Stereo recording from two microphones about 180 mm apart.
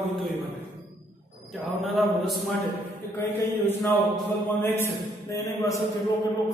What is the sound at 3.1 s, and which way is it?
A man's voice, 15° left (ahead or behind).